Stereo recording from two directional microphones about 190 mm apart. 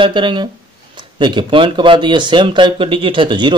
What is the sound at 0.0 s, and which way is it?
Speech, 25° right (ahead or behind).